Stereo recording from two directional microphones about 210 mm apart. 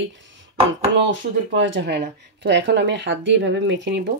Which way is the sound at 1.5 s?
60° right (ahead or behind).